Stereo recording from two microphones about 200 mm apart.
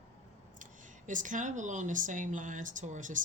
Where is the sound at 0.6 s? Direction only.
40° right (ahead or behind).